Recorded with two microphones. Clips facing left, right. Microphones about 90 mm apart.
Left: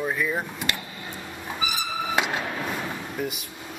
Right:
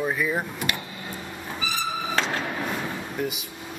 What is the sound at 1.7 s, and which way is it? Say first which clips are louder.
Vehicle: even; 15° left (ahead or behind).